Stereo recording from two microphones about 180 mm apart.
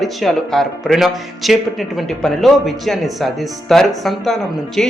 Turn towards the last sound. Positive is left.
turn(degrees=0)  # may be behind; listen again after turning